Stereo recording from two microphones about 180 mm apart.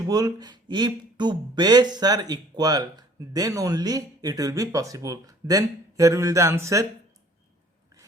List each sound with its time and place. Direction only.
0.0 s speech: 20° right (ahead or behind)